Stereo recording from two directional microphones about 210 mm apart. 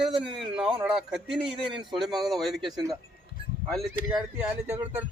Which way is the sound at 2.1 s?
Centre (ahead or behind).